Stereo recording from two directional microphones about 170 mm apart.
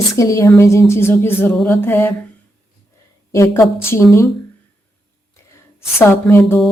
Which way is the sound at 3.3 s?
20° left (ahead or behind).